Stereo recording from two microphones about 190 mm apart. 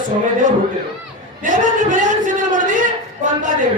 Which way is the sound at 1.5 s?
40° right (ahead or behind).